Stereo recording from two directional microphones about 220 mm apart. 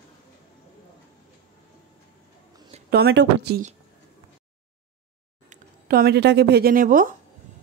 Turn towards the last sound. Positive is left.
turn(degrees=-40)  # may be behind; listen again after turning